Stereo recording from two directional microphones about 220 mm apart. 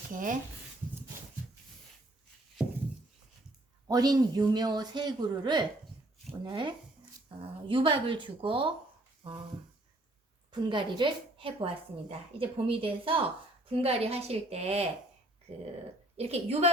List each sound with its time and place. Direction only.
0.1 s speech: 35° right (ahead or behind)
3.8 s a woman's voice: 15° right (ahead or behind)
10.5 s a woman's voice: 20° right (ahead or behind)
16.1 s a woman's voice: 30° right (ahead or behind)